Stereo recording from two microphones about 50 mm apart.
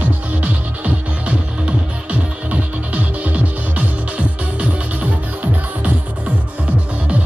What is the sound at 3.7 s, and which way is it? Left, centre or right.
Music, right.